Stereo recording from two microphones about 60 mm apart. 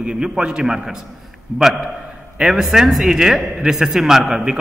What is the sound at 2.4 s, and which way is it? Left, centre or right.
A man's voice, centre.